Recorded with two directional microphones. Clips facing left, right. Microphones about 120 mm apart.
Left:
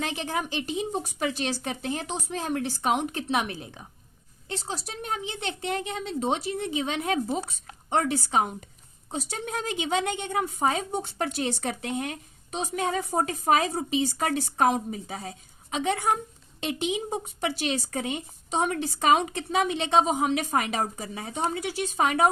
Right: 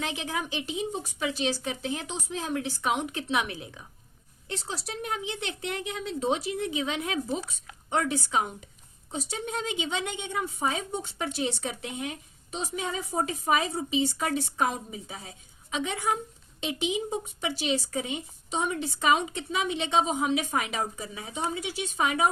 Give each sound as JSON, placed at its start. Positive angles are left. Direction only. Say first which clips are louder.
{"t": 0.0, "sound": "a woman's voice", "louder": "left 2 dB", "side_deg": 40}
{"t": 9.9, "sound": "a woman's voice", "louder": "left 5 dB", "side_deg": 50}
{"t": 17.1, "sound": "a woman's voice", "louder": "left 2 dB", "side_deg": 50}